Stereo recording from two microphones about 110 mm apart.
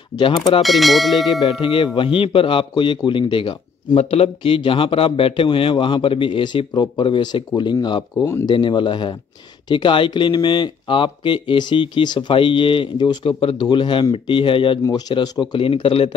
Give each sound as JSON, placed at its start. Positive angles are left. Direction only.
{"t": 0.6, "sound": "bell", "side_deg": 0}
{"t": 1.5, "sound": "speech", "side_deg": 55}
{"t": 3.9, "sound": "speech", "side_deg": 70}